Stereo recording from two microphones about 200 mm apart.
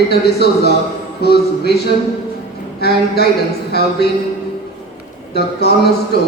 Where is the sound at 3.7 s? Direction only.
55° left (ahead or behind).